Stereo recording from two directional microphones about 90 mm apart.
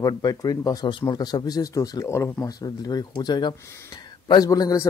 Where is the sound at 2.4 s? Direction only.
45° left (ahead or behind).